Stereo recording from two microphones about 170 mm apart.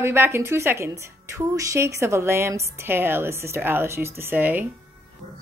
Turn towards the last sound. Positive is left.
turn(degrees=-10)  # may be behind; listen again after turning